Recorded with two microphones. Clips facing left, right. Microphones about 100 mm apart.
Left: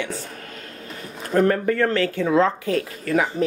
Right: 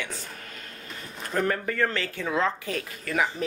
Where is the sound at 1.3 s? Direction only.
5° left (ahead or behind).